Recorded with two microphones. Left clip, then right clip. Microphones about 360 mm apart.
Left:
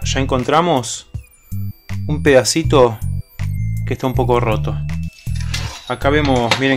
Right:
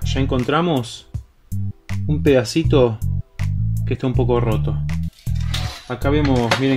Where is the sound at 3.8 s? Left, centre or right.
Centre.